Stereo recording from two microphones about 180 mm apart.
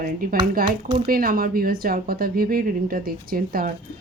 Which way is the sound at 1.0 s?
55° right (ahead or behind).